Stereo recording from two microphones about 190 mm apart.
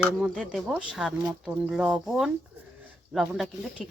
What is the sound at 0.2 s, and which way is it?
Speech, centre (ahead or behind).